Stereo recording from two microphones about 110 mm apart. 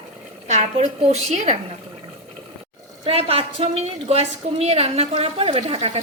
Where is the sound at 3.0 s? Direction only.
65° right (ahead or behind).